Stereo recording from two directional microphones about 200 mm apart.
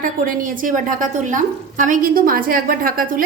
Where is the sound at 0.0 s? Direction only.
45° right (ahead or behind).